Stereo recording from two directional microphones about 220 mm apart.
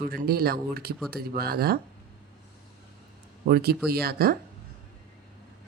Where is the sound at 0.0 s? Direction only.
40° right (ahead or behind).